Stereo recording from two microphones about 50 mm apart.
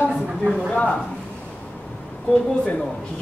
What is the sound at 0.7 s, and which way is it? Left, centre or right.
Speech, left.